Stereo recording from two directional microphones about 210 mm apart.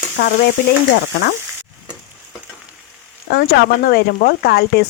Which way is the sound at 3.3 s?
50° left (ahead or behind).